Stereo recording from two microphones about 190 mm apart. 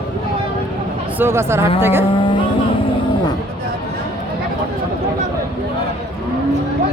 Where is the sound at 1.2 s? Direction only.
15° right (ahead or behind).